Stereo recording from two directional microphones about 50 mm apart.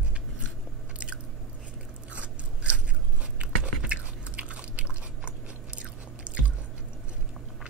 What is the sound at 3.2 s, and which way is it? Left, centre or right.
Chewing, right.